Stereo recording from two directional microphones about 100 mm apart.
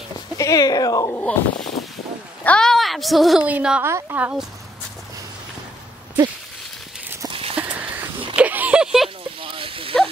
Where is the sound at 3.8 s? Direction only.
25° right (ahead or behind).